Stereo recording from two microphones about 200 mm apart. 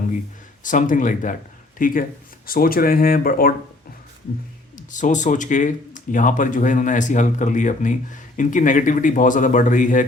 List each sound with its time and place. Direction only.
0.6 s speech: 40° left (ahead or behind)
4.9 s speech: 40° left (ahead or behind)